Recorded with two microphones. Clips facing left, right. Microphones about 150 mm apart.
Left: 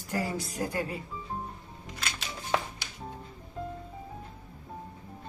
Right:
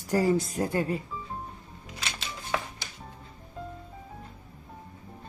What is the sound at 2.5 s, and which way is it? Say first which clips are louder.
Music: left 2 dB; 25° left (ahead or behind).